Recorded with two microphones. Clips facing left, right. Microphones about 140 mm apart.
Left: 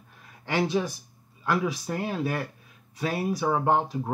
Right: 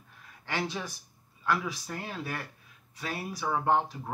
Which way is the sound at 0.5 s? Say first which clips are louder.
Left 8 dB; 15° left (ahead or behind).